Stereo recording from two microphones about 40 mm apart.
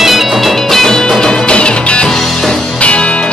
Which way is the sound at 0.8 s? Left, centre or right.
Centre.